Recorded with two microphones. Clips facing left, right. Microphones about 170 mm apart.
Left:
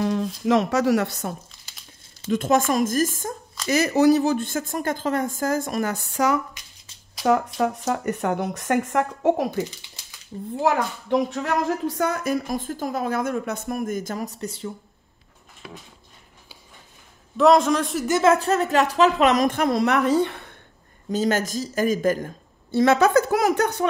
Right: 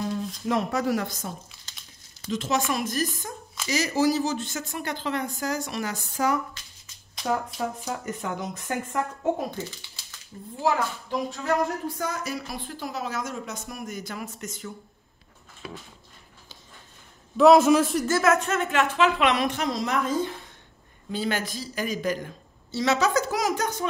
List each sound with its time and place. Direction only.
0.0 s speech: 90° left; by 1.3 s 65° left (ahead or behind)
2.3 s speech: 50° left (ahead or behind)
3.6 s speech: 55° left (ahead or behind)
6.6 s shuffling cards: 15° left (ahead or behind)
7.2 s speech: 70° left (ahead or behind)
9.8 s a sound: 20° left (ahead or behind)
10.6 s speech: 65° left (ahead or behind); by 14.7 s 30° left (ahead or behind)
17.4 s a man's voice: 5° right (ahead or behind)
18.0 s speech: 20° left (ahead or behind)
18.3 s speech: 35° left (ahead or behind); by 20.5 s 65° left (ahead or behind)
21.1 s speech: 45° left (ahead or behind); by 23.9 s 65° left (ahead or behind)